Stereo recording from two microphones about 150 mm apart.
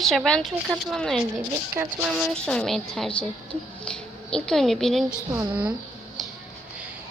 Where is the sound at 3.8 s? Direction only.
5° left (ahead or behind).